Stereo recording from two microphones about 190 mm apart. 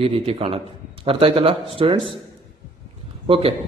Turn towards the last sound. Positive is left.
turn(degrees=-30)  # may be behind; listen again after turning